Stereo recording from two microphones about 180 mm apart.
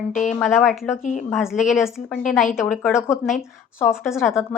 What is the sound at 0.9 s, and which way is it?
Speech, 45° left (ahead or behind).